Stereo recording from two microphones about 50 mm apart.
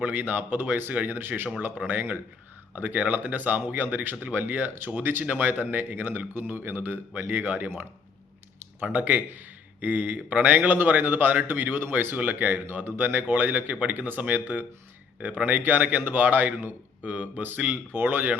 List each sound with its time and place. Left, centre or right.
0.0 s a man's voice: right
1.7 s a man's voice: right
8.8 s a man's voice: right